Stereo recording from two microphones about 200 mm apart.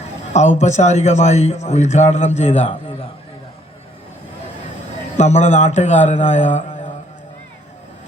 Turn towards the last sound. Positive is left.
turn(degrees=35)  # may be behind; listen again after turning